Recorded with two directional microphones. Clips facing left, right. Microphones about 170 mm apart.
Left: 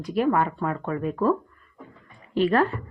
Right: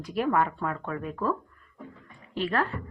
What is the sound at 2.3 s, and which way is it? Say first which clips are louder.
Speech: left 7 dB; 15° left (ahead or behind).